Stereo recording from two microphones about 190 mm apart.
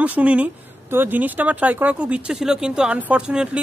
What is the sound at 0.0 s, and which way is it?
Speech, 5° right (ahead or behind).